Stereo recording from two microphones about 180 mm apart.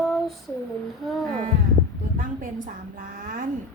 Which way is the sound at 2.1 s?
50° right (ahead or behind).